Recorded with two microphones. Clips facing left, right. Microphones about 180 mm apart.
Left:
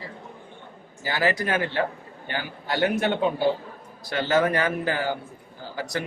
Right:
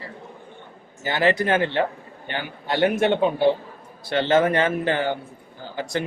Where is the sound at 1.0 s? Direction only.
25° right (ahead or behind).